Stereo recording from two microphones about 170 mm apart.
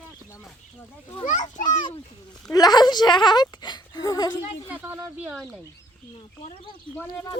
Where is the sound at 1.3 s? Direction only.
50° left (ahead or behind).